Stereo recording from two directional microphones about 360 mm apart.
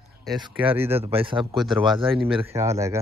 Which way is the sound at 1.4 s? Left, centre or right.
Centre.